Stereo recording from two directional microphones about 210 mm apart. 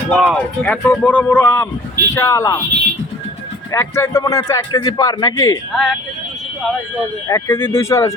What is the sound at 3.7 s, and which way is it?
A man's voice, 15° left (ahead or behind).